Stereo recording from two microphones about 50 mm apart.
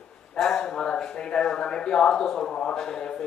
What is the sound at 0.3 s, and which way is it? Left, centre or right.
Speech, centre.